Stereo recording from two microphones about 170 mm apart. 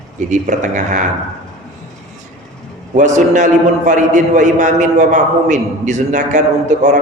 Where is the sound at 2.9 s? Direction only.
45° right (ahead or behind).